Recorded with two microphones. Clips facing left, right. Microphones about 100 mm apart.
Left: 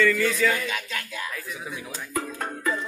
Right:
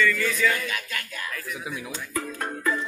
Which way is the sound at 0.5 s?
25° left (ahead or behind).